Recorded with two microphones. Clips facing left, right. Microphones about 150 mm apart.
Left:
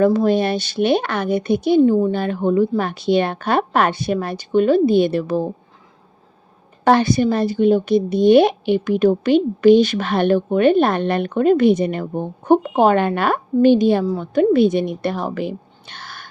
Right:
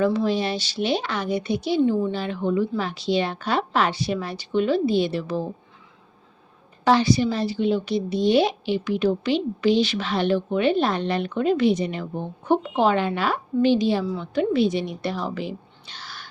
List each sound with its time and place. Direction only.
0.0 s a woman's voice: 45° left (ahead or behind)
6.8 s a woman's voice: 55° left (ahead or behind)